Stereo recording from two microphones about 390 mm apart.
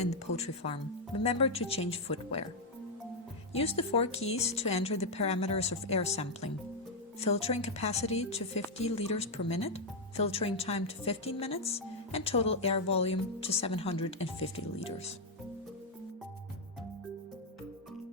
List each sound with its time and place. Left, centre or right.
0.0 s speech: centre
3.5 s speech: centre